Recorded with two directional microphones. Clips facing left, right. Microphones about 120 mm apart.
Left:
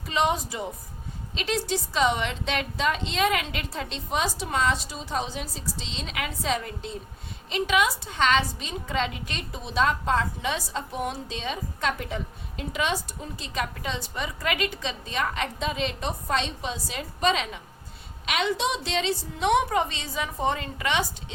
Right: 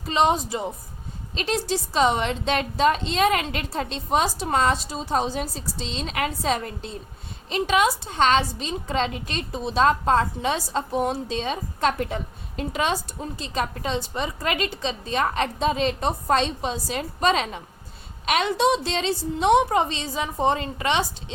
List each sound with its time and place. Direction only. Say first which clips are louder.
0.1 s a woman's voice: right 4 dB; 30° right (ahead or behind)